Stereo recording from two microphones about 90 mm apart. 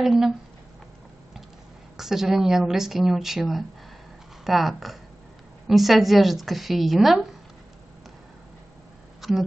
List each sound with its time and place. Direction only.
0.0 s a woman's voice: 5° right (ahead or behind)
2.0 s a woman's voice: 5° right (ahead or behind)
9.2 s speech: centre (ahead or behind)